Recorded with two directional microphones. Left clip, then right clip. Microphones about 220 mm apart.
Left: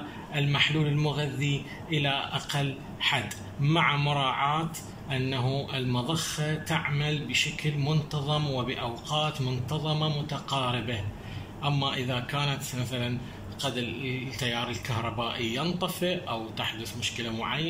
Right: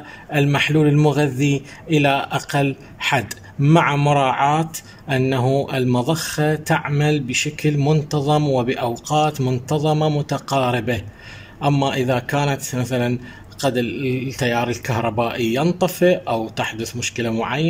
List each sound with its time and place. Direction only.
0.3 s a man's voice: 55° right (ahead or behind)